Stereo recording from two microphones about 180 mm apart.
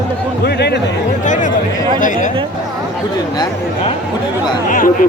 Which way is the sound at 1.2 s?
45° left (ahead or behind).